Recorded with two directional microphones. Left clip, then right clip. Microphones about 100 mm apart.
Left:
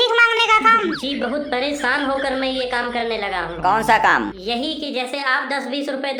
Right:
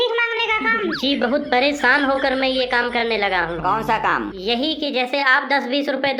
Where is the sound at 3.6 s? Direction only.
15° left (ahead or behind).